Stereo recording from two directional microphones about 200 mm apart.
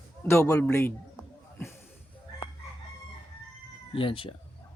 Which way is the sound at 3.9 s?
25° left (ahead or behind).